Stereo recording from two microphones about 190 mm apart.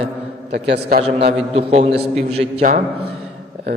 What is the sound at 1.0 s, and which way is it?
A man's voice, 35° right (ahead or behind).